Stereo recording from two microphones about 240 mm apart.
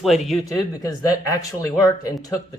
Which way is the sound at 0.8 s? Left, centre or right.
Centre.